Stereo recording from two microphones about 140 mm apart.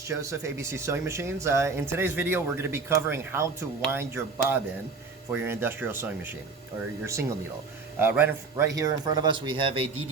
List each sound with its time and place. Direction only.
0.0 s speech: 20° right (ahead or behind); by 9.8 s 35° right (ahead or behind)